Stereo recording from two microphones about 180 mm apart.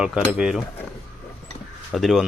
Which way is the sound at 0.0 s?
5° right (ahead or behind).